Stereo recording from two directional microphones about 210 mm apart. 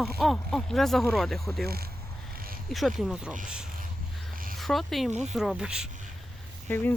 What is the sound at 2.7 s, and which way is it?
Speech, centre (ahead or behind).